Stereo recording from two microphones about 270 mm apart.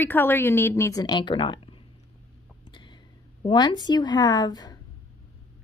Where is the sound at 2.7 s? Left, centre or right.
Centre.